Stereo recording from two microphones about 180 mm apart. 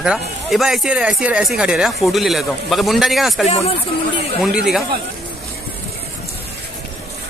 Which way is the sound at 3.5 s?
35° left (ahead or behind).